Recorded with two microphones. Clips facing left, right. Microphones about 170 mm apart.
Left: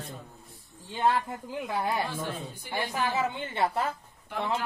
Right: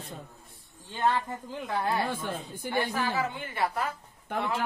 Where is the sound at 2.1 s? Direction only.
50° right (ahead or behind).